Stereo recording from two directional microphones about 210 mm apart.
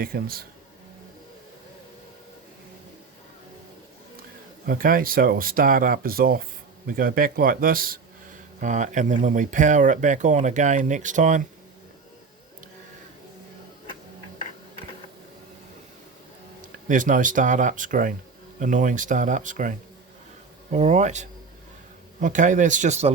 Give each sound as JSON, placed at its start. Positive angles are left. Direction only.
{"t": 0.0, "sound": "speech", "side_deg": -45}
{"t": 4.6, "sound": "speech", "side_deg": -40}
{"t": 16.6, "sound": "speech", "side_deg": -40}